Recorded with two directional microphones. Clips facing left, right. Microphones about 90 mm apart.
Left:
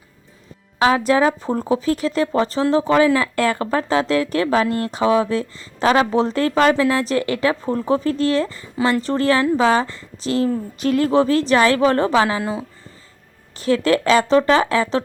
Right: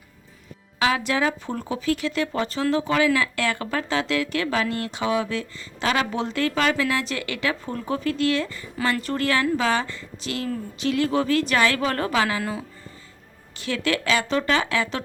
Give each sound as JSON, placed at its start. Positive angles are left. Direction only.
{"t": 0.8, "sound": "speech", "side_deg": 35}
{"t": 13.6, "sound": "speech", "side_deg": 35}